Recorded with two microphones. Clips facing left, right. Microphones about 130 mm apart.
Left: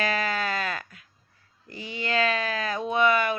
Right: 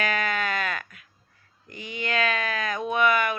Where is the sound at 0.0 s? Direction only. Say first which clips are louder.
Even; 30° left (ahead or behind).